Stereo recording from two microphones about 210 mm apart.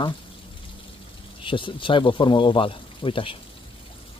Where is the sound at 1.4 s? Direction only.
25° left (ahead or behind).